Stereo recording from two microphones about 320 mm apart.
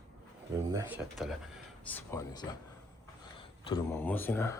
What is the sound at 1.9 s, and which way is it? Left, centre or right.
Speech, centre.